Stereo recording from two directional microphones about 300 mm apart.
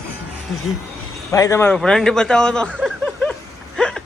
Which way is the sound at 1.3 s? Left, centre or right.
Centre.